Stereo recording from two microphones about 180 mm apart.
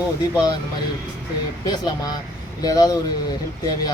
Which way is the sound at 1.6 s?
25° left (ahead or behind).